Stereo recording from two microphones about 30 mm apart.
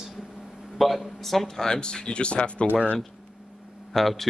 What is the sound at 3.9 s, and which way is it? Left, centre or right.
Speech, centre.